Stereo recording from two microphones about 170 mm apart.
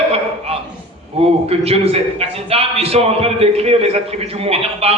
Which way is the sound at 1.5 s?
35° right (ahead or behind).